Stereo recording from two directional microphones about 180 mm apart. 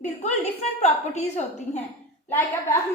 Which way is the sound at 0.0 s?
40° left (ahead or behind).